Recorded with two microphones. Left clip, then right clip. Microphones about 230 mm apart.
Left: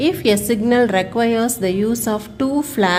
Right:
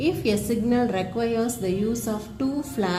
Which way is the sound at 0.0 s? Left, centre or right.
Left.